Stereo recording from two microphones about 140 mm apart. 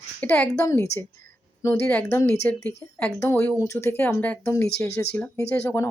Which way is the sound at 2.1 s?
20° left (ahead or behind).